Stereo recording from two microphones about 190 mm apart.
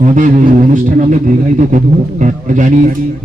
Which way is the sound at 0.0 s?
40° right (ahead or behind).